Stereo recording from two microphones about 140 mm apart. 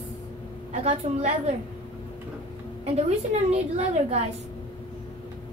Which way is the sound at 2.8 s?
50° right (ahead or behind).